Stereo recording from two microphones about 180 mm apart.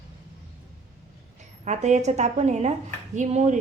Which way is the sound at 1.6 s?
40° right (ahead or behind).